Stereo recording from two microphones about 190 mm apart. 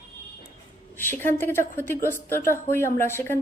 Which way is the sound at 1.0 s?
10° left (ahead or behind).